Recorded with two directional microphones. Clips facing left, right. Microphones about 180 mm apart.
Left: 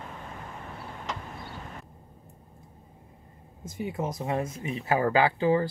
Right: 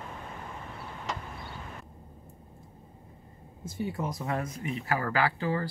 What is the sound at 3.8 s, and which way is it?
Speech, 20° left (ahead or behind).